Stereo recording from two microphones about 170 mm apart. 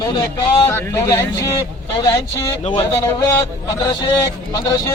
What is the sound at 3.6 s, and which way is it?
Speech, 20° left (ahead or behind).